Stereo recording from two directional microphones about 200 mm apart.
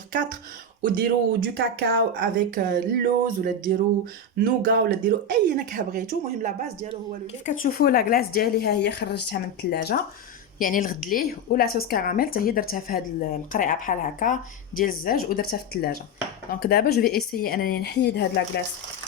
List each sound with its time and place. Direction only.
0.8 s speech: 45° right (ahead or behind)
7.4 s speech: 45° left (ahead or behind)